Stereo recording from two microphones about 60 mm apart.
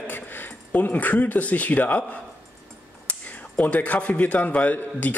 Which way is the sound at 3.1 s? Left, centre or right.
Left.